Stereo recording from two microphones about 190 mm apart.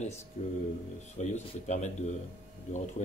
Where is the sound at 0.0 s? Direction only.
35° left (ahead or behind).